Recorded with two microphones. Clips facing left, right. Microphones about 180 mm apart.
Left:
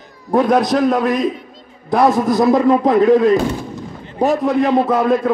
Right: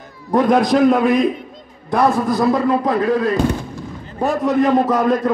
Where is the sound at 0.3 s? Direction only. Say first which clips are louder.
Even; 5° left (ahead or behind).